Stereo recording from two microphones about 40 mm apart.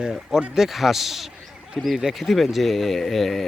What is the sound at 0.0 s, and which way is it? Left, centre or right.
Speech, centre.